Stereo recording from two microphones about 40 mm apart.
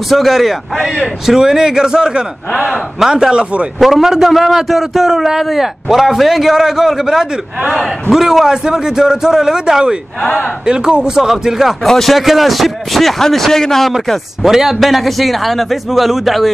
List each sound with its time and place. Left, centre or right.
0.1 s a man's voice: centre
3.8 s a man's voice: centre
11.8 s a man's voice: centre
14.4 s a man's voice: centre